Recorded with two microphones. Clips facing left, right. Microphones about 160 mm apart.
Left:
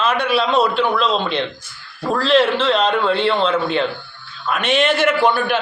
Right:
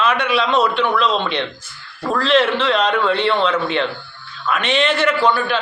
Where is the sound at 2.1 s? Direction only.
35° left (ahead or behind).